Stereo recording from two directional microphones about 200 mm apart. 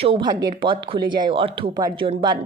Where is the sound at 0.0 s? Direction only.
25° right (ahead or behind).